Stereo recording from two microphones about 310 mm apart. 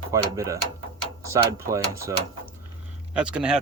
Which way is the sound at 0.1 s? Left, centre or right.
Centre.